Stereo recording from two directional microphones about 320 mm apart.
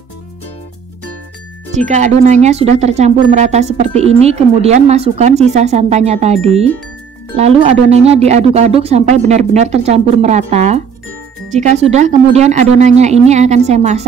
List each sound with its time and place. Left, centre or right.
1.8 s speech: right